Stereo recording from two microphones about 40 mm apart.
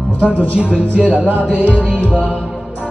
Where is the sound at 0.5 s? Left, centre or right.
Right.